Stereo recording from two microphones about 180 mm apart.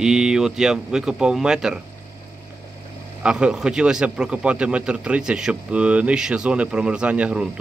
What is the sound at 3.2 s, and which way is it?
A man's voice, 5° right (ahead or behind).